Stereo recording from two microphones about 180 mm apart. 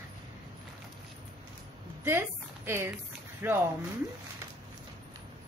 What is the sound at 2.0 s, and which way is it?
A woman's voice, 15° right (ahead or behind).